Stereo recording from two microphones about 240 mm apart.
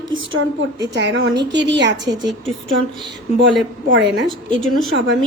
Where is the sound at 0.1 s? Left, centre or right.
Right.